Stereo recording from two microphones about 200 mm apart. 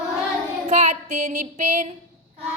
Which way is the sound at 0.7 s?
35° right (ahead or behind).